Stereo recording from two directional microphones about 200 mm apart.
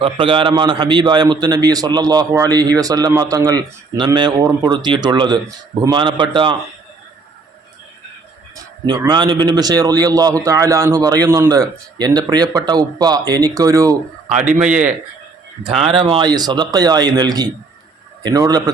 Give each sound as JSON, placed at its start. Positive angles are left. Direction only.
{"t": 0.0, "sound": "a man's voice", "side_deg": -25}
{"t": 8.5, "sound": "a man's voice", "side_deg": -20}
{"t": 14.3, "sound": "a man's voice", "side_deg": -35}
{"t": 14.6, "sound": "a man's voice", "side_deg": -5}
{"t": 15.7, "sound": "a man's voice", "side_deg": -30}